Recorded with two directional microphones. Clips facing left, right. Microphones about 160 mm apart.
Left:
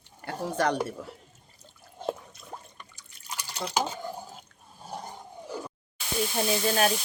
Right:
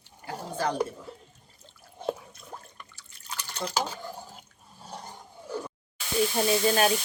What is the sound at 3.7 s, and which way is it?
Dishes, 15° left (ahead or behind).